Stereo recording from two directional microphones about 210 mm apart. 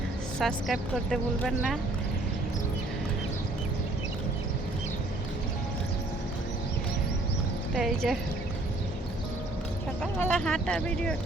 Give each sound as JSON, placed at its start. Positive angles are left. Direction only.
{"t": 0.3, "sound": "a woman's voice", "side_deg": 0}
{"t": 7.8, "sound": "a woman's voice", "side_deg": 0}
{"t": 10.0, "sound": "a woman's voice", "side_deg": 5}